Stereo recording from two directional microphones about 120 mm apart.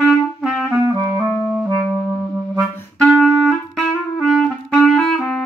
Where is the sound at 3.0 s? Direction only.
Centre (ahead or behind).